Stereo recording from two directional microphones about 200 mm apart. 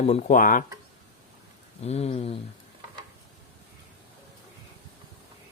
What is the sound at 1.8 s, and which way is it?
Speech, 30° left (ahead or behind).